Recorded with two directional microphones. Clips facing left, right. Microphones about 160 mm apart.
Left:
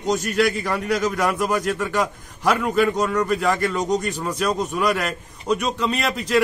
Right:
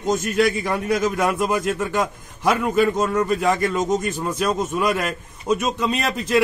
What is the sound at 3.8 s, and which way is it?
A man's voice, 5° right (ahead or behind).